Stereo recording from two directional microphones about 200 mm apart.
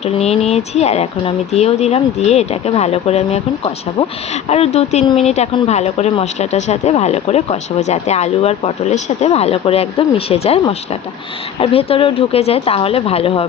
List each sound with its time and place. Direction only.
0.2 s speech: 30° left (ahead or behind)
11.6 s speech: 30° left (ahead or behind)